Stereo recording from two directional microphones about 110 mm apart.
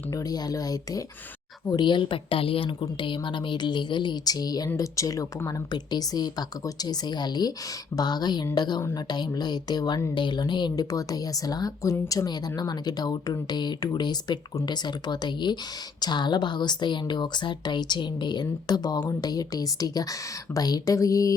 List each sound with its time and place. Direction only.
0.1 s speech: 35° left (ahead or behind)
1.7 s a woman's voice: 45° left (ahead or behind)